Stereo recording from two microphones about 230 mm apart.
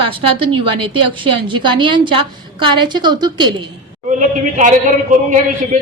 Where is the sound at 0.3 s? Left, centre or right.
Right.